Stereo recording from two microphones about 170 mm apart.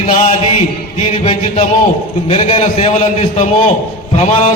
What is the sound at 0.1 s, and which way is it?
Mantra, 45° left (ahead or behind).